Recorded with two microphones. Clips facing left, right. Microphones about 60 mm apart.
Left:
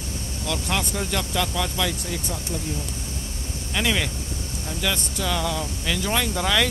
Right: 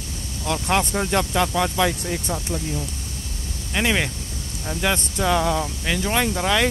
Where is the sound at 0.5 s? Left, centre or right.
Right.